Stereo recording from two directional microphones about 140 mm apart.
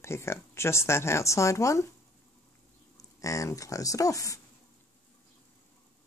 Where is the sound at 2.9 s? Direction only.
25° left (ahead or behind).